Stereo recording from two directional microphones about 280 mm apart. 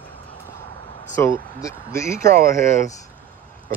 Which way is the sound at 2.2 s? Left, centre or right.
Right.